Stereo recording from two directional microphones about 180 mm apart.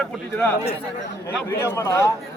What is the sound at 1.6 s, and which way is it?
Speech, 15° left (ahead or behind).